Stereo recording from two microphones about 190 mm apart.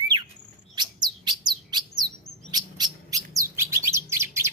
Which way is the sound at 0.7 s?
20° right (ahead or behind).